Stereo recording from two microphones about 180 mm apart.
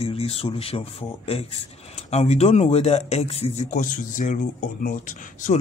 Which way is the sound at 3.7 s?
45° left (ahead or behind).